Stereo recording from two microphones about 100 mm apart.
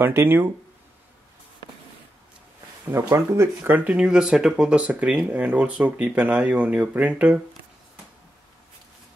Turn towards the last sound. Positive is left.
turn(degrees=-10)  # may be behind; listen again after turning